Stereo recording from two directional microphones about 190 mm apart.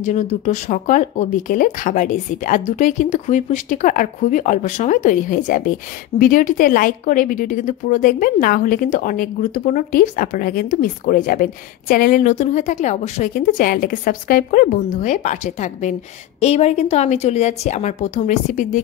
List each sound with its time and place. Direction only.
0.0 s a woman's voice: 40° left (ahead or behind)